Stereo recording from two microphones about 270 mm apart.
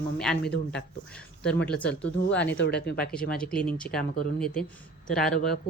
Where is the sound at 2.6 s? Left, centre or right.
Left.